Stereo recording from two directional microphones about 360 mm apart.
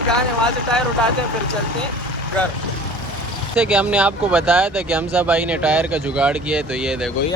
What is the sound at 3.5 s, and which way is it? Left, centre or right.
Speech, centre.